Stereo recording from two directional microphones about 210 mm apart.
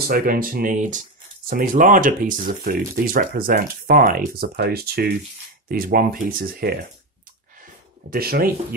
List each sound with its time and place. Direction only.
0.0 s speech: 45° right (ahead or behind)
8.1 s speech: 45° right (ahead or behind)